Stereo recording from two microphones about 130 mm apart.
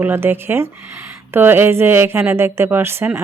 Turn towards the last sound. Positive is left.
turn(degrees=-20)  # may be behind; listen again after turning